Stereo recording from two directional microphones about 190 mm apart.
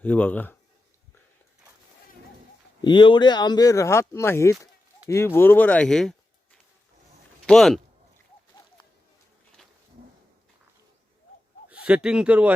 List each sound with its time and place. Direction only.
0.0 s speech: 10° left (ahead or behind)
2.8 s speech: 25° left (ahead or behind); by 7.8 s centre (ahead or behind)
11.7 s speech: 5° right (ahead or behind)